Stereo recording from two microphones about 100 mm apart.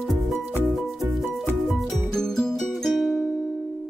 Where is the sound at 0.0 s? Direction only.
Centre (ahead or behind).